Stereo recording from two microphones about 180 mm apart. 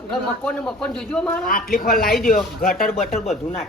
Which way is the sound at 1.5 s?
55° left (ahead or behind).